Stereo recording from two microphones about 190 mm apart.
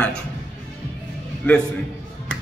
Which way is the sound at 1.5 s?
10° left (ahead or behind).